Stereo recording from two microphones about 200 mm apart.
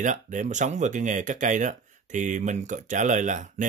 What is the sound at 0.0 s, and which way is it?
Speech, 40° right (ahead or behind).